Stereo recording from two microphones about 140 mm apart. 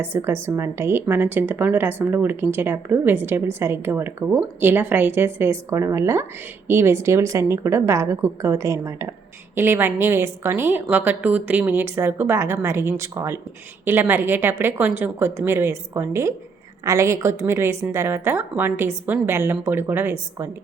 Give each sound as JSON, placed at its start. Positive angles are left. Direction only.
{"t": 0.0, "sound": "a woman's voice", "side_deg": -15}